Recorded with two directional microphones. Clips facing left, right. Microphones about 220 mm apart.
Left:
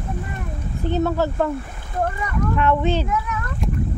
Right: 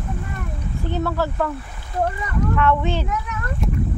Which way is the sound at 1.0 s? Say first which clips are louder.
Left 1 dB; 20° left (ahead or behind).